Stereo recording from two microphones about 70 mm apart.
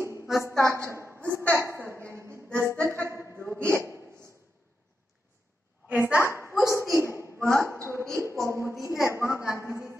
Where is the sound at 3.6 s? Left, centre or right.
Right.